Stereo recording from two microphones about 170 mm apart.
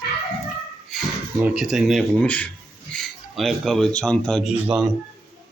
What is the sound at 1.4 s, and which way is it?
Speech, 5° right (ahead or behind).